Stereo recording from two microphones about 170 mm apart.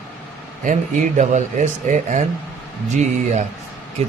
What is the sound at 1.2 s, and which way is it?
Speech, 45° right (ahead or behind).